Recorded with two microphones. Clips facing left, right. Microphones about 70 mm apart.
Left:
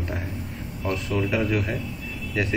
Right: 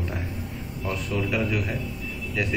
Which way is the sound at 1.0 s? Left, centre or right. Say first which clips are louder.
Left 2 dB; centre.